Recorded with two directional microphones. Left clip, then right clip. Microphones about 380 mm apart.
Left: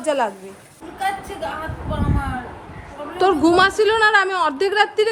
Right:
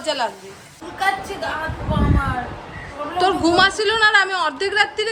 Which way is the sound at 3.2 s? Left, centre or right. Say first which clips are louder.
Left 1 dB; centre.